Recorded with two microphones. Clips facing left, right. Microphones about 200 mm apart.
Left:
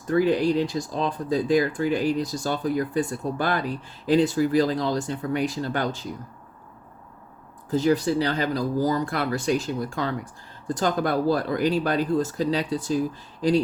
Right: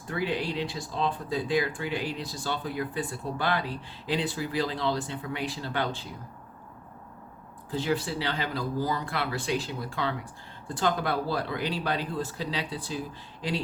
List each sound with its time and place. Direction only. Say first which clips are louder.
0.1 s speech: left 10 dB; 40° left (ahead or behind)
7.7 s speech: left 8 dB; 40° left (ahead or behind)